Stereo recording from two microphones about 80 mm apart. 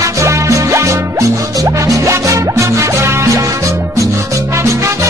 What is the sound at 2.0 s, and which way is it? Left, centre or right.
Music, right.